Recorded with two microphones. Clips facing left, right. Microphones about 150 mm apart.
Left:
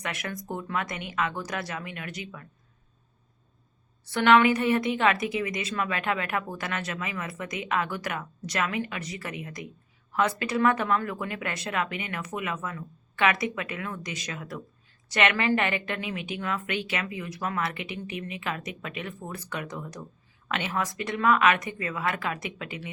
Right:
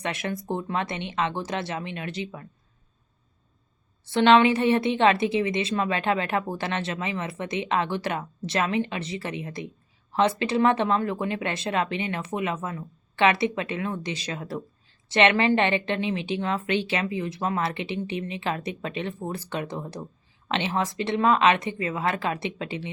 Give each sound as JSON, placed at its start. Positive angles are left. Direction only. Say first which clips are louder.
{"t": 0.0, "sound": "a woman's voice", "louder": "right 5 dB", "side_deg": -25}
{"t": 4.0, "sound": "a woman's voice", "louder": "right 2 dB", "side_deg": -25}